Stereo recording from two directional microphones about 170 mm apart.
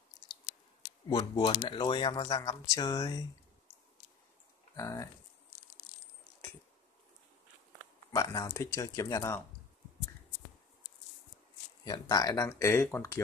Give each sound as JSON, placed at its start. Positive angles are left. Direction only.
{"t": 1.0, "sound": "speech", "side_deg": 25}
{"t": 4.7, "sound": "speech", "side_deg": 20}
{"t": 8.1, "sound": "speech", "side_deg": 20}
{"t": 11.8, "sound": "speech", "side_deg": 25}